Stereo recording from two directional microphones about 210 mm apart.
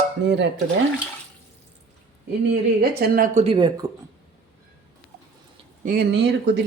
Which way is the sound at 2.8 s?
45° right (ahead or behind).